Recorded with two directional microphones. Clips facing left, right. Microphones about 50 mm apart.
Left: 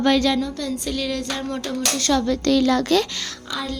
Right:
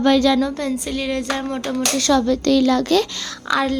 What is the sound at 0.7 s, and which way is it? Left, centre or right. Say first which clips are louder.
A woman's voice: right 3 dB; centre.